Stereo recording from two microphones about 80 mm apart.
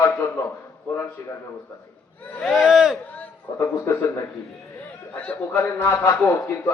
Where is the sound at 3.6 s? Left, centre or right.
Left.